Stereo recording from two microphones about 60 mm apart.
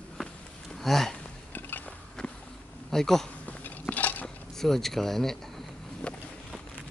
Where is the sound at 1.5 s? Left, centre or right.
Left.